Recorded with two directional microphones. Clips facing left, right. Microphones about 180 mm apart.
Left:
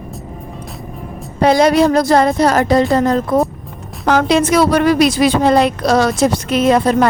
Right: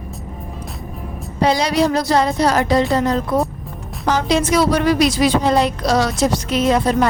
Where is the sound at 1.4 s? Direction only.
55° left (ahead or behind).